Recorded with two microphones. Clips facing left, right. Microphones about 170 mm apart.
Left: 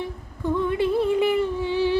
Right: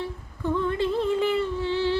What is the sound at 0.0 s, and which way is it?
Humming, 15° left (ahead or behind).